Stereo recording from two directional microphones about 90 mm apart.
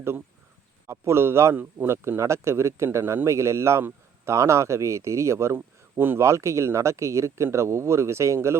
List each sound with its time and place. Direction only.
0.9 s speech: 30° right (ahead or behind)